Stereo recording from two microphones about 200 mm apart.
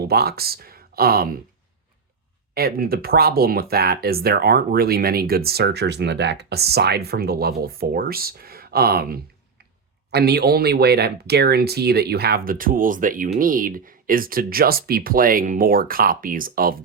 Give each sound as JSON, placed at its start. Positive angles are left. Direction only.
{"t": 0.0, "sound": "speech", "side_deg": -50}
{"t": 2.6, "sound": "speech", "side_deg": -50}